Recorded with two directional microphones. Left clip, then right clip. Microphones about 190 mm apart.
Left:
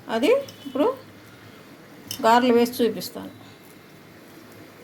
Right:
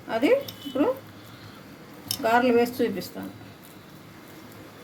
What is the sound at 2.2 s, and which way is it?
Speech, 40° left (ahead or behind).